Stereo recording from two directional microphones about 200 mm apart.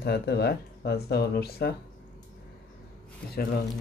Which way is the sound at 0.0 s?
55° left (ahead or behind).